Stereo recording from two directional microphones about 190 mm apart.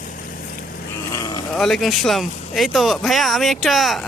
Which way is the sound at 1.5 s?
Centre (ahead or behind).